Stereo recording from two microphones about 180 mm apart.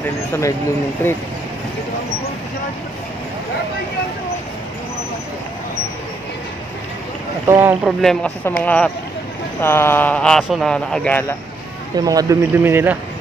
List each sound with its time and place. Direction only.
0.3 s speech: 15° left (ahead or behind)
7.4 s speech: 10° right (ahead or behind)
8.0 s speech: 5° left (ahead or behind)
12.0 s speech: 20° right (ahead or behind)